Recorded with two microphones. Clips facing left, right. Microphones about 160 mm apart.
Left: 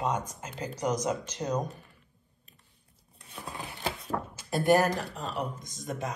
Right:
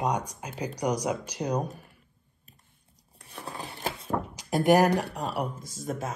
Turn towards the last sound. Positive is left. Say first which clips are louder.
# right 2 dB
turn(degrees=-5)  # may be behind; listen again after turning